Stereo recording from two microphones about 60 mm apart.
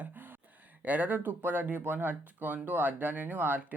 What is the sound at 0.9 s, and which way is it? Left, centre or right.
Speech, right.